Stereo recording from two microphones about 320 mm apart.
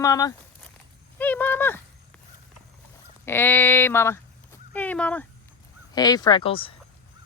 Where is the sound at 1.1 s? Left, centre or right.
Centre.